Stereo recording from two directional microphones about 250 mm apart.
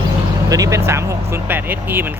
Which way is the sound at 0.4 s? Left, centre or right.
Centre.